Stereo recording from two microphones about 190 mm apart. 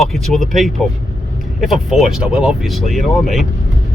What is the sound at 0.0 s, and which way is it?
Speech, centre (ahead or behind).